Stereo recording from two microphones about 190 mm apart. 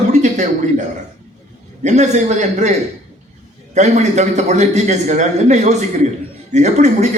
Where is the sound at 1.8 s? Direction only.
35° right (ahead or behind).